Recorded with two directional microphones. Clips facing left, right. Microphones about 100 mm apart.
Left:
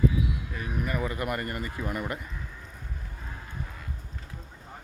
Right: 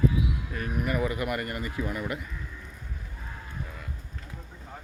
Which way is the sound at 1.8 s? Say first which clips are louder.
Right 1 dB; 5° left (ahead or behind).